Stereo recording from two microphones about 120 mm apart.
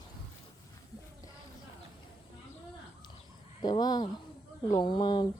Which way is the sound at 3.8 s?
35° left (ahead or behind).